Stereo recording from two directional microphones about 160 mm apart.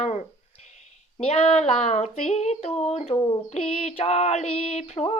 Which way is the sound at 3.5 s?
40° left (ahead or behind).